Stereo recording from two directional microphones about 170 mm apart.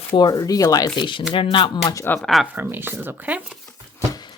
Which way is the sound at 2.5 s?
10° right (ahead or behind).